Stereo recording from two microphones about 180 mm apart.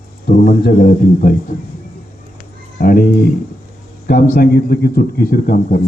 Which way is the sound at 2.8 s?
55° left (ahead or behind).